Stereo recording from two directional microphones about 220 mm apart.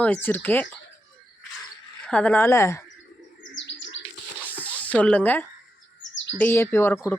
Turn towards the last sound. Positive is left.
turn(degrees=10)  # may be behind; listen again after turning